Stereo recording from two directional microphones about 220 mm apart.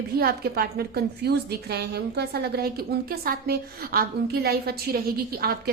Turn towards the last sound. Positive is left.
turn(degrees=-45)  # may be behind; listen again after turning